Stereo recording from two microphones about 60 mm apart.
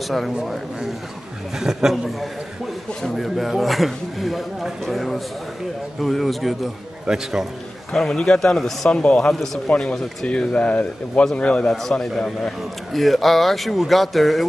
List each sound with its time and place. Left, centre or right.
0.4 s a man's voice: centre
7.1 s a man's voice: centre
7.9 s speech: centre
8.9 s speech: centre
9.3 s speech: centre
9.7 s a man's voice: centre
12.1 s speech: centre